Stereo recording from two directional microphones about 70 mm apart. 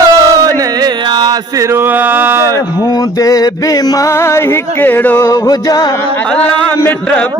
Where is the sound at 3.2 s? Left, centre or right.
Left.